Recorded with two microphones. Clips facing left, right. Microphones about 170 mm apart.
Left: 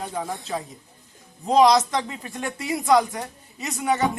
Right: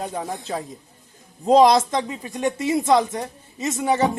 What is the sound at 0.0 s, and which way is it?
Speech, 35° right (ahead or behind).